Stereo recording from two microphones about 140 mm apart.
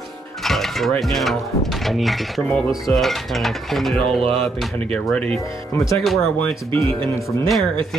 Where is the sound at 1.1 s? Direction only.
Centre (ahead or behind).